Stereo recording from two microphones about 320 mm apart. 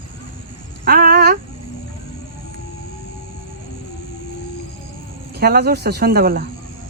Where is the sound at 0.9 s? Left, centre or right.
Right.